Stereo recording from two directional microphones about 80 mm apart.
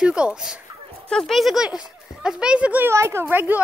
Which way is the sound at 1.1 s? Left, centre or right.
Centre.